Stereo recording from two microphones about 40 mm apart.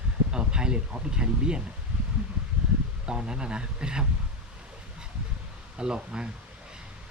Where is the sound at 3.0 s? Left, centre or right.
Right.